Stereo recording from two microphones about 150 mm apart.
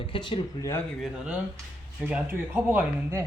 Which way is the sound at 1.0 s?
5° right (ahead or behind).